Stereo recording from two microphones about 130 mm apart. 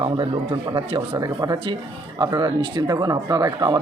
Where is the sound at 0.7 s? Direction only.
35° right (ahead or behind).